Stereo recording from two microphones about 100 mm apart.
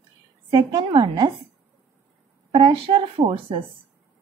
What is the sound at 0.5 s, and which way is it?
Speech, 45° right (ahead or behind).